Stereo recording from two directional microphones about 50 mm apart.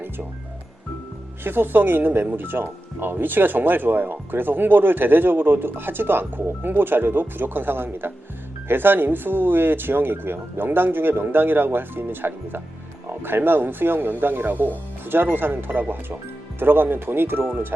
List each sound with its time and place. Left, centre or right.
1.5 s speech: right